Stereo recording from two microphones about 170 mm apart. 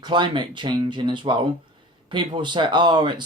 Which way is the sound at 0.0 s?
25° right (ahead or behind).